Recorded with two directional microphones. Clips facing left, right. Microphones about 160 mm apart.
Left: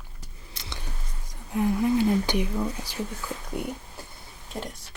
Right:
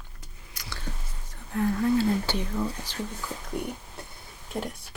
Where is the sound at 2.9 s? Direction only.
10° left (ahead or behind).